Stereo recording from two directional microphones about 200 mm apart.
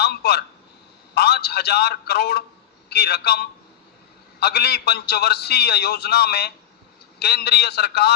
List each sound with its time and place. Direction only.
0.0 s telephone: 55° left (ahead or behind)
1.1 s a man's voice: 55° left (ahead or behind)